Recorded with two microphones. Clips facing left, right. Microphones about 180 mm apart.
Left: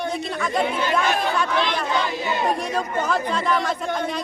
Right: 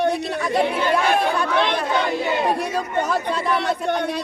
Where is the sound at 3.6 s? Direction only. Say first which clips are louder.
Right 3 dB; 65° right (ahead or behind).